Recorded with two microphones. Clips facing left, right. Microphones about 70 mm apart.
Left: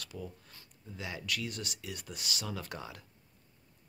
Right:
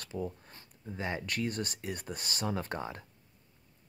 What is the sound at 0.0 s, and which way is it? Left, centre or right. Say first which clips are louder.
Speech: right 6 dB; right.